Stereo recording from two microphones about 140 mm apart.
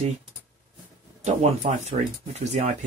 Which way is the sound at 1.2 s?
55° right (ahead or behind).